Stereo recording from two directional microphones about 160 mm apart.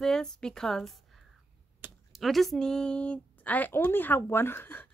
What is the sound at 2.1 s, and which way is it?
Speech, centre (ahead or behind).